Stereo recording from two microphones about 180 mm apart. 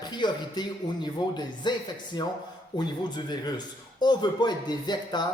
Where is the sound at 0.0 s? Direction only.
25° left (ahead or behind).